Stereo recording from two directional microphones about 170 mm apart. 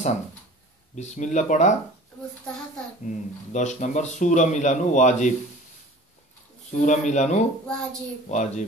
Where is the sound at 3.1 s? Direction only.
45° left (ahead or behind).